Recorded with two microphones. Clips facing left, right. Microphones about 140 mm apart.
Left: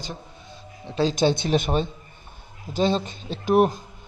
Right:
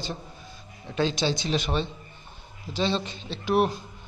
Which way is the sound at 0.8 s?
30° left (ahead or behind).